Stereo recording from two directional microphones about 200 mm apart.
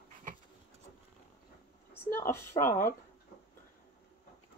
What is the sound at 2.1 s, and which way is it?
Speech, 10° left (ahead or behind).